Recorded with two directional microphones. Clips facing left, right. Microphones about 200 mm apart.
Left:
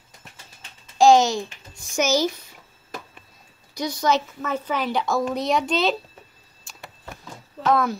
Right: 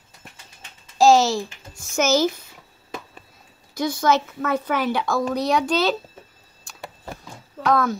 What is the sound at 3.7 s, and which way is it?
A woman's voice, 15° left (ahead or behind).